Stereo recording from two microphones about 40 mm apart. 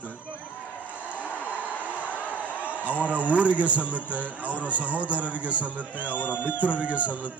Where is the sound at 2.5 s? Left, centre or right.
Left.